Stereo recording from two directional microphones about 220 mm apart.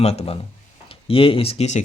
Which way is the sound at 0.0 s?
30° left (ahead or behind).